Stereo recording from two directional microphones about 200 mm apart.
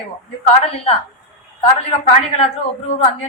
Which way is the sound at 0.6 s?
30° left (ahead or behind).